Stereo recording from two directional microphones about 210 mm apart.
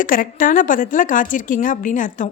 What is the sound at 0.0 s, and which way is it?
A woman's voice, 40° left (ahead or behind).